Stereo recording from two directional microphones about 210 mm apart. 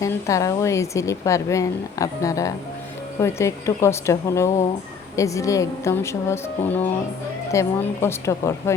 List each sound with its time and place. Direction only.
0.0 s speech: 15° left (ahead or behind)